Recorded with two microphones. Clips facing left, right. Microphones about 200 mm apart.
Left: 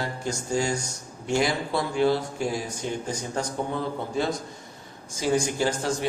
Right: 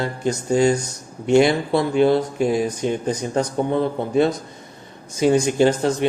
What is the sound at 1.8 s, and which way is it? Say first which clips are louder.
Speech: right 6 dB; 20° right (ahead or behind).